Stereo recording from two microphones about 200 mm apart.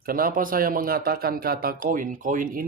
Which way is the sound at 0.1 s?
45° right (ahead or behind).